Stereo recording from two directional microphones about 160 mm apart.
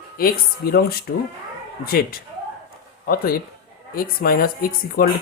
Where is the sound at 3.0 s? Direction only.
70° left (ahead or behind).